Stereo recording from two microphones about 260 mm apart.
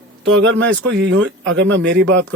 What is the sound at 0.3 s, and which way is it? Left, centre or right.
Speech, right.